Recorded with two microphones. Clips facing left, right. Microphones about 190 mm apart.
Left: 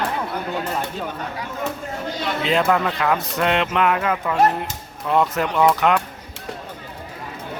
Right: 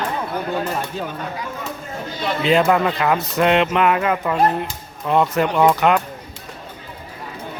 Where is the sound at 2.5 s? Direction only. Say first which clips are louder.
Right 4 dB; 5° right (ahead or behind).